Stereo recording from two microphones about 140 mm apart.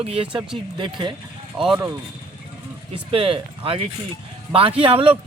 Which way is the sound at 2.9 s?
40° right (ahead or behind).